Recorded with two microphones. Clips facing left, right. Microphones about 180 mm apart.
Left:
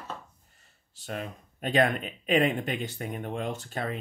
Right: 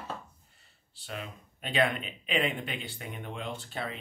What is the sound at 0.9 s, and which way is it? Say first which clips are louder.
Speech: left 5 dB; 45° left (ahead or behind).